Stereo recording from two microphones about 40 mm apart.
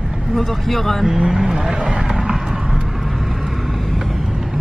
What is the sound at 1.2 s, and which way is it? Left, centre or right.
Speech, centre.